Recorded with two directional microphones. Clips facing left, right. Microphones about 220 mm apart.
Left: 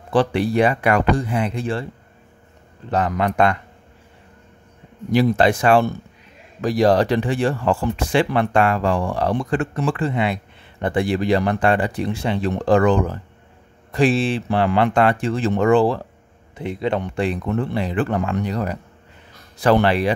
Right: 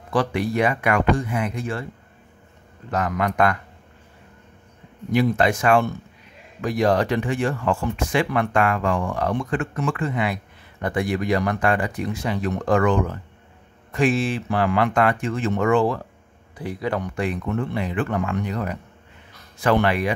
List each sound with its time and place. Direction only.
0.1 s speech: 30° left (ahead or behind)
2.9 s a man's voice: 30° left (ahead or behind)
5.1 s speech: 35° left (ahead or behind)